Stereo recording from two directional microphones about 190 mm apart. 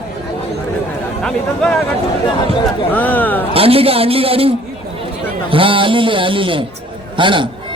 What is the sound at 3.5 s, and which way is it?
A man's voice, 30° right (ahead or behind).